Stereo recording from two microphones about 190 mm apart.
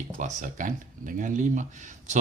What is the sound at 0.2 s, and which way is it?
Speech, 40° right (ahead or behind).